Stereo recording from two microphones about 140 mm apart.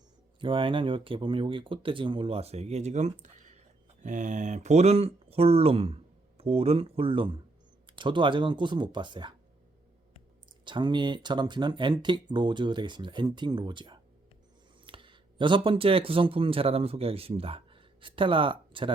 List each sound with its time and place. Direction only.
0.3 s speech: 35° right (ahead or behind)
10.7 s speech: 35° right (ahead or behind)